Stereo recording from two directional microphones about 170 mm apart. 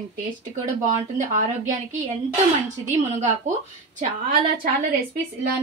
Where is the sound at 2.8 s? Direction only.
45° right (ahead or behind).